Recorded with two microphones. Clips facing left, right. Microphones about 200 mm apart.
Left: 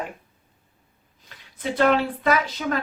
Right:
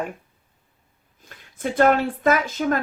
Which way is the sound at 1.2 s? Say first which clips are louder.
Right 2 dB; 50° right (ahead or behind).